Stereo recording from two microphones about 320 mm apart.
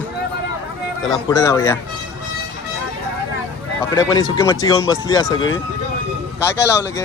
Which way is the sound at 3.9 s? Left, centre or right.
Centre.